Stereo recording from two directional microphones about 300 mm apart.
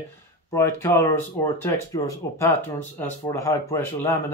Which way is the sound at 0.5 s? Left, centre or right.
Centre.